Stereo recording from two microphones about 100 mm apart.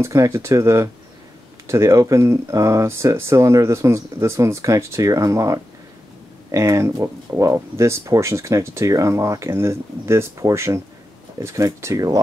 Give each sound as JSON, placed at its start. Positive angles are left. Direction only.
{"t": 0.0, "sound": "speech", "side_deg": -30}